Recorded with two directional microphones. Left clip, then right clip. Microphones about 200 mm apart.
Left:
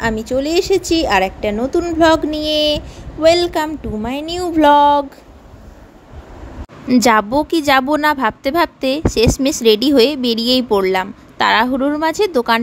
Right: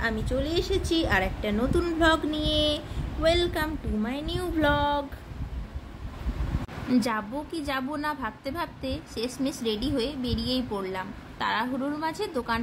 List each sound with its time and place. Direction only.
0.0 s child singing: 35° left (ahead or behind)
6.9 s a woman's voice: 45° left (ahead or behind)